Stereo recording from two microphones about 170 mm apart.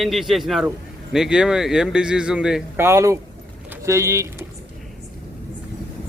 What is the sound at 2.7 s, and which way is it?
Speech, 15° right (ahead or behind).